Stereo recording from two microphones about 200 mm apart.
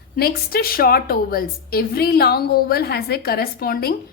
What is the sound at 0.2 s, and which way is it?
A woman's voice, 50° left (ahead or behind).